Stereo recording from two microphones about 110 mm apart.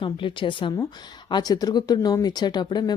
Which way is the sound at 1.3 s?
35° left (ahead or behind).